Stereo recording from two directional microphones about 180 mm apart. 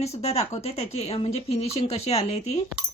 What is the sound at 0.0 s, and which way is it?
Speech, 35° left (ahead or behind).